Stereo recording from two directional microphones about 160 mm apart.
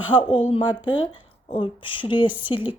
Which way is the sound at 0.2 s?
30° left (ahead or behind).